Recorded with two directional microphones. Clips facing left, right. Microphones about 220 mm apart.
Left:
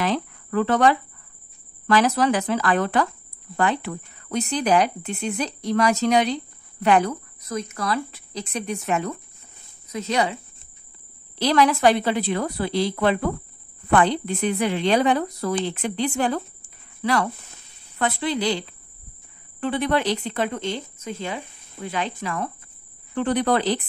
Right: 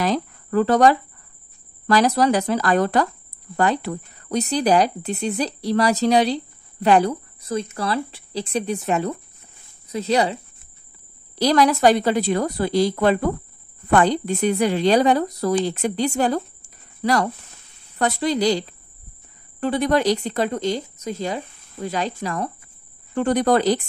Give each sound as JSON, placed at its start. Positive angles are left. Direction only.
{"t": 0.0, "sound": "speech", "side_deg": -40}
{"t": 11.3, "sound": "speech", "side_deg": -40}